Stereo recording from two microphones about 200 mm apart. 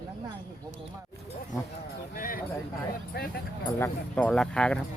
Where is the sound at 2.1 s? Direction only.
45° left (ahead or behind).